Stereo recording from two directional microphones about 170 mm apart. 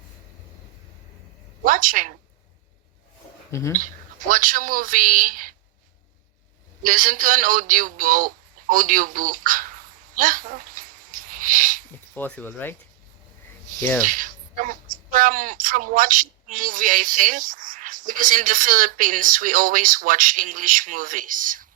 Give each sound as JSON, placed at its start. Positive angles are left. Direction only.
{"t": 1.6, "sound": "speech", "side_deg": -50}
{"t": 3.5, "sound": "speech", "side_deg": 15}
{"t": 4.3, "sound": "speech", "side_deg": -50}
{"t": 6.8, "sound": "speech", "side_deg": -50}
{"t": 12.1, "sound": "speech", "side_deg": 10}
{"t": 13.7, "sound": "speech", "side_deg": -50}